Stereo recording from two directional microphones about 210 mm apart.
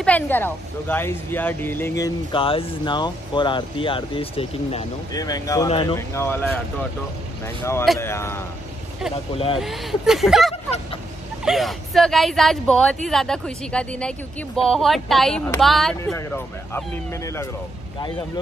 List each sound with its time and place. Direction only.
0.0 s speech: 10° left (ahead or behind); by 4.8 s 25° left (ahead or behind)
5.1 s speech: 15° left (ahead or behind)
5.9 s speech: 10° left (ahead or behind)
9.3 s speech: 25° left (ahead or behind)
9.6 s speech: centre (ahead or behind)